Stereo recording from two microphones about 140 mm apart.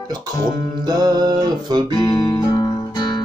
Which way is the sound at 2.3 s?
25° left (ahead or behind).